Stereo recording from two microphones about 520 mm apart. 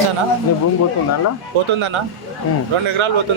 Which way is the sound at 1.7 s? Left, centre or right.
Right.